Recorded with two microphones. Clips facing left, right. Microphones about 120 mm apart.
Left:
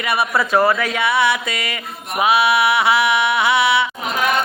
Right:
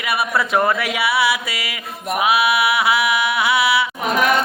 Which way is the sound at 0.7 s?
10° right (ahead or behind).